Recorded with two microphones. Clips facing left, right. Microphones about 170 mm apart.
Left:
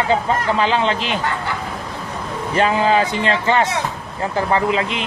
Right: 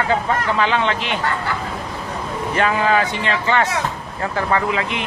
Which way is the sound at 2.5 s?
30° left (ahead or behind).